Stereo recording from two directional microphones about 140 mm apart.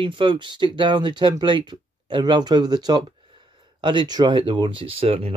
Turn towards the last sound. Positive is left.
turn(degrees=-45)  # may be behind; listen again after turning